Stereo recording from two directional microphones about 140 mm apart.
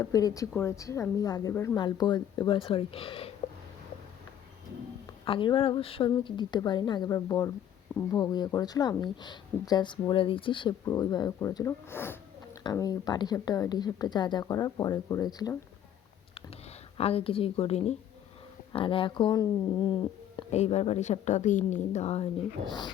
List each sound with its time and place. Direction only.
0.0 s a woman's voice: 25° left (ahead or behind)
1.8 s speech: 35° left (ahead or behind)
5.2 s a woman's voice: 35° left (ahead or behind)
17.0 s a woman's voice: 45° left (ahead or behind)
18.7 s speech: 40° left (ahead or behind)
20.5 s a woman's voice: 50° left (ahead or behind)